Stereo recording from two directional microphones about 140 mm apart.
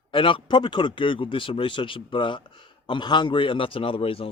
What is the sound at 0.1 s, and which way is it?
Speech, 40° left (ahead or behind).